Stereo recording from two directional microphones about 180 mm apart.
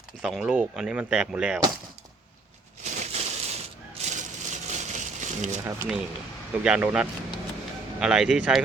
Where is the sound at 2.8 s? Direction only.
40° right (ahead or behind).